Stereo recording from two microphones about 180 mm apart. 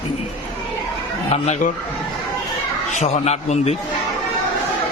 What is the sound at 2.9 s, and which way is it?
Speech, 40° left (ahead or behind).